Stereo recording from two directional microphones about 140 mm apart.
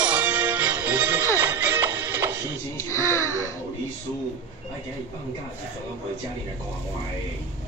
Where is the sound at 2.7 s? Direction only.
20° left (ahead or behind).